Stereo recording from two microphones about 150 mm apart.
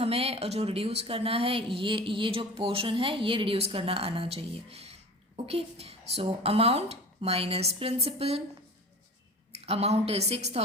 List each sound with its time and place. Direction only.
0.0 s a woman's voice: 40° right (ahead or behind)
9.5 s a woman's voice: 45° right (ahead or behind)